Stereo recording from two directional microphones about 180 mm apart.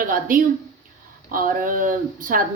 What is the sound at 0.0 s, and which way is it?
Speech, 50° right (ahead or behind).